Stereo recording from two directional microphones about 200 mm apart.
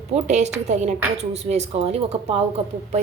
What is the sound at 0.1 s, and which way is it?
A woman's voice, 35° right (ahead or behind).